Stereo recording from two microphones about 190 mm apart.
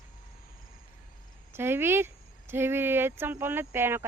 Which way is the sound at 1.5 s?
10° right (ahead or behind).